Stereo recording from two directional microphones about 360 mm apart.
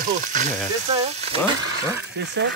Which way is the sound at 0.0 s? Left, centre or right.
Right.